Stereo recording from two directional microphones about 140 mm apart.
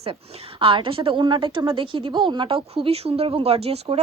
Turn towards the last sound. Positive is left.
turn(degrees=-45)  # may be behind; listen again after turning